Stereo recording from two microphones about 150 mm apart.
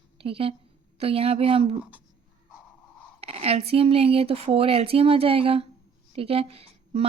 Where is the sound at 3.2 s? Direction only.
40° right (ahead or behind).